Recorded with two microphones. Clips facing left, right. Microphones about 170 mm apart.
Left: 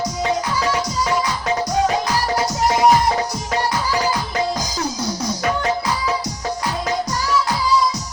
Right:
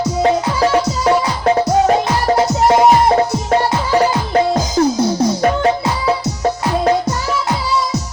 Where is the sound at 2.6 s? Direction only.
55° right (ahead or behind).